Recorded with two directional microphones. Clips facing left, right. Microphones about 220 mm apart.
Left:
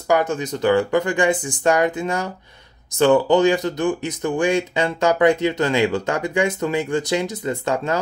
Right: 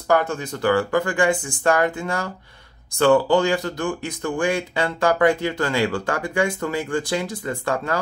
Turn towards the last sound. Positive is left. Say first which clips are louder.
# left 2 dB
turn(degrees=20)  # may be behind; listen again after turning